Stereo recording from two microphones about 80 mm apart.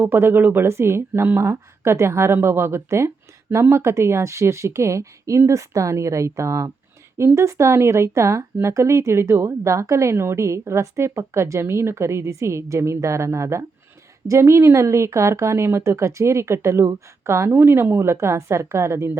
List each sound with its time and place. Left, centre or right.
0.0 s a woman's voice: right